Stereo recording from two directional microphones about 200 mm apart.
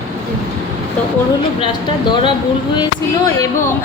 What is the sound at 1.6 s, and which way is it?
A woman's voice, 25° left (ahead or behind).